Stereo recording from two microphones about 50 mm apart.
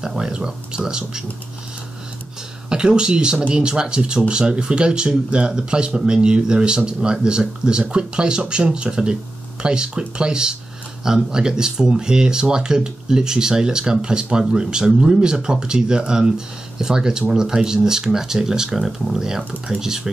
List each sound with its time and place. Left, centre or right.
0.0 s speech: centre
2.7 s speech: centre